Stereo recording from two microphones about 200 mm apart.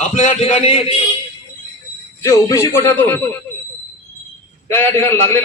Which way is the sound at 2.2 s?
15° left (ahead or behind).